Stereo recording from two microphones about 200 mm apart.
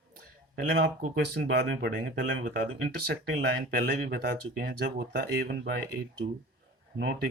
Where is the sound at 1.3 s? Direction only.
60° right (ahead or behind).